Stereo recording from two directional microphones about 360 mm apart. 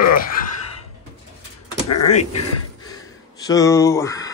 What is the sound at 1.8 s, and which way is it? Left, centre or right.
Speech, left.